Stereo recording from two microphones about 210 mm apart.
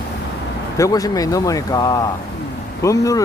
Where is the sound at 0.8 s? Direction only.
15° left (ahead or behind).